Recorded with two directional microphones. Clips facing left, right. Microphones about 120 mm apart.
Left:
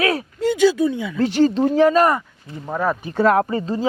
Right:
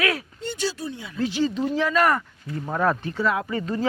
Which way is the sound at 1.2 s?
65° left (ahead or behind).